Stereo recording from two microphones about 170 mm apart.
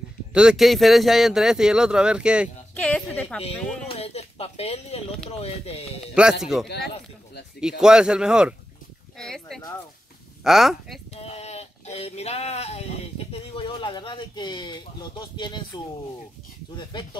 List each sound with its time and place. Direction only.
0.3 s speech: 5° right (ahead or behind)
2.7 s speech: 10° left (ahead or behind)
3.9 s speech: 40° left (ahead or behind)
6.1 s speech: 5° right (ahead or behind)
11.1 s speech: 40° left (ahead or behind)
16.9 s speech: 30° left (ahead or behind)